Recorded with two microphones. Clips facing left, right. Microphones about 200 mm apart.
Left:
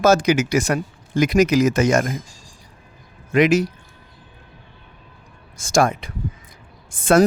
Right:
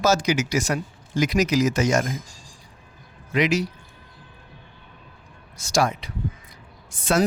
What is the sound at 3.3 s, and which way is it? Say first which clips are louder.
Speech: left 6 dB; 50° left (ahead or behind).